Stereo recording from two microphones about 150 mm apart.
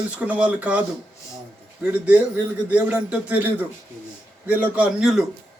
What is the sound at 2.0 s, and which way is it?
A man's voice, 10° right (ahead or behind).